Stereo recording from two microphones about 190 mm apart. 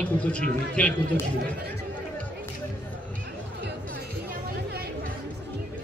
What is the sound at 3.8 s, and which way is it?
Chatter, 55° right (ahead or behind).